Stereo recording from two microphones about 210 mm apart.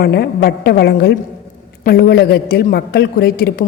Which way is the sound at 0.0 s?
50° left (ahead or behind).